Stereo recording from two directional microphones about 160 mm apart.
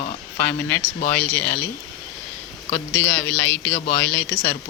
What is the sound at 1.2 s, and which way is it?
Speech, 10° left (ahead or behind).